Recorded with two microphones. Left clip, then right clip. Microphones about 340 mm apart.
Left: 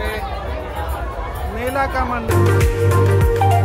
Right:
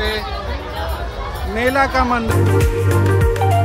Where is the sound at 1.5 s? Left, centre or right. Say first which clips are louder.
Right 5 dB; right.